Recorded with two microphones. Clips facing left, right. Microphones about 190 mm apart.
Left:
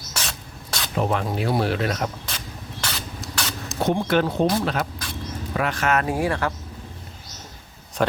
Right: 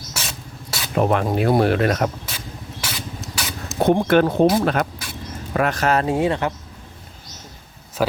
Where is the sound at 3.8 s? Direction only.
55° right (ahead or behind).